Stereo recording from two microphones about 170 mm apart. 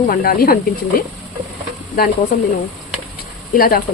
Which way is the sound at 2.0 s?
60° left (ahead or behind).